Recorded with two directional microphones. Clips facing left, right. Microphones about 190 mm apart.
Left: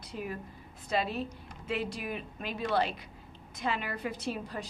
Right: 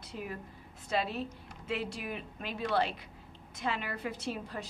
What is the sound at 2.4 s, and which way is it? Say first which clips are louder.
A woman's voice: left 1 dB; 15° left (ahead or behind).